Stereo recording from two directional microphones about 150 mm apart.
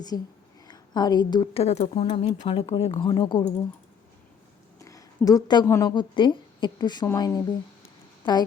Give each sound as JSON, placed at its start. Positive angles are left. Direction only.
{"t": 0.7, "sound": "a woman's voice", "side_deg": 25}
{"t": 1.6, "sound": "speech", "side_deg": 45}
{"t": 4.8, "sound": "a sound", "side_deg": 20}
{"t": 5.6, "sound": "a woman's voice", "side_deg": 15}
{"t": 5.9, "sound": "speech", "side_deg": 30}